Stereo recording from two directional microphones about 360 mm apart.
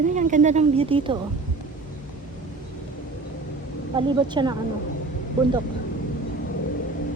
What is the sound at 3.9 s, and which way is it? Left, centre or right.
Speech, centre.